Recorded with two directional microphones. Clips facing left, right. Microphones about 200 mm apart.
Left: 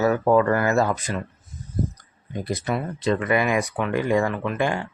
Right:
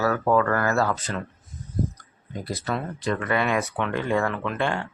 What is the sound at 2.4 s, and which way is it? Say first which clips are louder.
Speech: left 3 dB; 20° left (ahead or behind).